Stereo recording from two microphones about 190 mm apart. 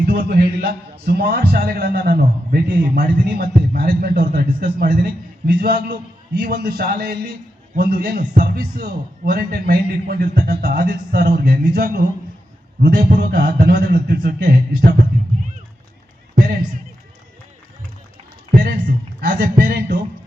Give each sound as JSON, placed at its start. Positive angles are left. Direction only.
{"t": 0.0, "sound": "a man's voice", "side_deg": -55}
{"t": 18.5, "sound": "a man's voice", "side_deg": -55}